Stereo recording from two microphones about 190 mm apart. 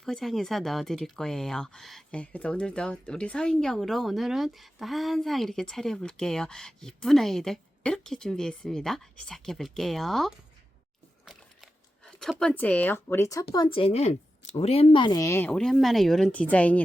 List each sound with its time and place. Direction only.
0.0 s speech: centre (ahead or behind)
11.3 s a sound: centre (ahead or behind)
13.5 s a woman's voice: 25° left (ahead or behind)
15.5 s speech: centre (ahead or behind)